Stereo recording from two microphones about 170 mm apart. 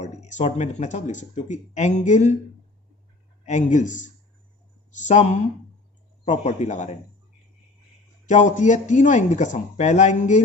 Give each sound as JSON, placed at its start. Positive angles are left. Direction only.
{"t": 0.0, "sound": "speech", "side_deg": 45}
{"t": 3.4, "sound": "speech", "side_deg": 45}
{"t": 8.3, "sound": "speech", "side_deg": 45}